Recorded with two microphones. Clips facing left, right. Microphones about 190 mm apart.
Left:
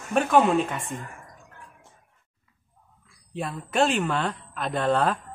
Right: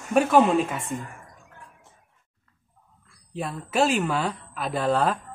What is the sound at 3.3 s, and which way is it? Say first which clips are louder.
Speech: right 1 dB; centre (ahead or behind).